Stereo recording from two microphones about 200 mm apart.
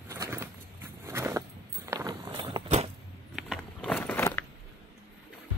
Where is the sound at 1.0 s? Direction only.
15° right (ahead or behind).